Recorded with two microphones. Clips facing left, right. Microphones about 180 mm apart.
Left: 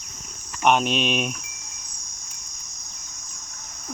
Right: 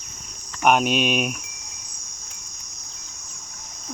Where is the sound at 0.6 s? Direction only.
5° right (ahead or behind).